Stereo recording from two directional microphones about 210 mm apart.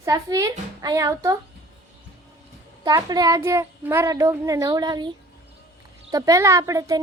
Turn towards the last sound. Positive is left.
turn(degrees=-15)  # may be behind; listen again after turning